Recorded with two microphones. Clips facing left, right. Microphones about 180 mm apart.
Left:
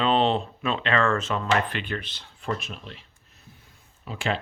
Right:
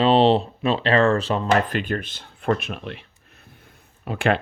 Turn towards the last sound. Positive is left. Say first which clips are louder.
# right 7 dB
turn(degrees=-60)  # may be behind; listen again after turning